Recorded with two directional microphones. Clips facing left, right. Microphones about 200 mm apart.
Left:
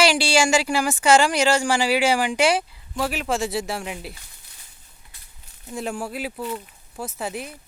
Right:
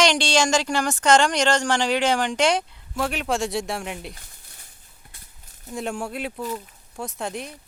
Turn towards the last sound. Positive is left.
turn(degrees=5)  # may be behind; listen again after turning